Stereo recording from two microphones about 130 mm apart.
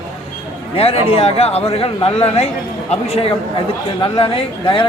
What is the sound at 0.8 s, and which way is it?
Speech, 50° left (ahead or behind).